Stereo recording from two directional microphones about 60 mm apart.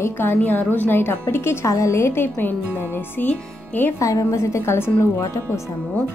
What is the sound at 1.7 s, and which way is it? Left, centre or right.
A woman's voice, left.